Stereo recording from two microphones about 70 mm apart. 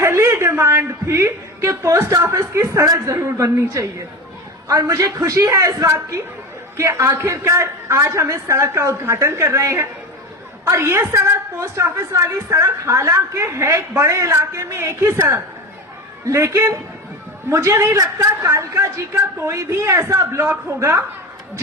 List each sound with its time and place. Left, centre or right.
0.0 s a woman's voice: right